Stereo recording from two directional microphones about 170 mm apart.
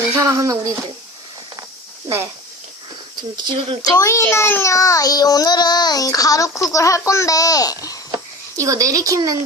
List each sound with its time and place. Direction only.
0.1 s speech: 15° right (ahead or behind)
2.0 s speech: 15° right (ahead or behind)
3.3 s speech: 30° right (ahead or behind)
3.9 s a child's voice: 20° left (ahead or behind)
8.5 s speech: 20° right (ahead or behind)